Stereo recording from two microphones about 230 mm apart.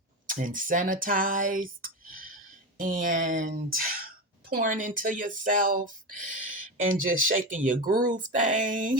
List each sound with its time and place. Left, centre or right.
0.3 s speech: right